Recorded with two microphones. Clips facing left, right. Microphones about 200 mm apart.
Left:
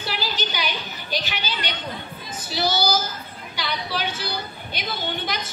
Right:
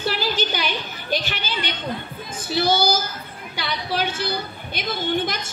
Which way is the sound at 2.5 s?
50° right (ahead or behind).